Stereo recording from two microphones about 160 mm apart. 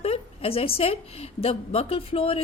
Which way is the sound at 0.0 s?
35° left (ahead or behind).